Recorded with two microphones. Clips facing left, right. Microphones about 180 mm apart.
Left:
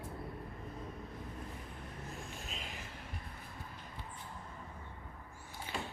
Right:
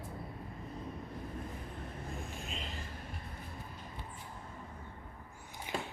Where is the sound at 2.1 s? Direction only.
Centre (ahead or behind).